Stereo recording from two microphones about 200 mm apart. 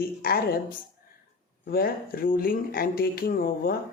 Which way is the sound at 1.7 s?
50° left (ahead or behind).